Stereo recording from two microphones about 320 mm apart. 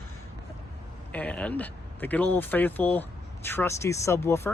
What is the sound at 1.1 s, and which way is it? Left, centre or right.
Speech, centre.